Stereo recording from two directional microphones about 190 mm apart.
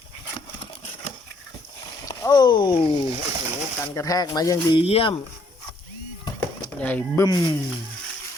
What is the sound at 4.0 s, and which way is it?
Speech, 20° left (ahead or behind).